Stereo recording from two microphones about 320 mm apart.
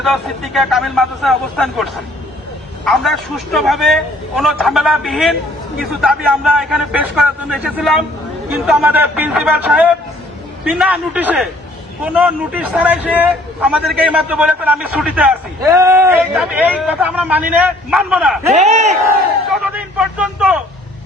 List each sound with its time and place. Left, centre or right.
0.0 s a man's voice: centre
18.5 s speech: right
19.7 s a man's voice: centre